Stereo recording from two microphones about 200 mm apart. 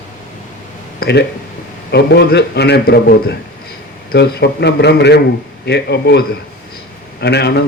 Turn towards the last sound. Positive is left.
turn(degrees=55)  # may be behind; listen again after turning